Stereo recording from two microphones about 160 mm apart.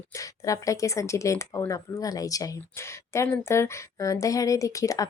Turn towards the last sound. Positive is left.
turn(degrees=20)  # may be behind; listen again after turning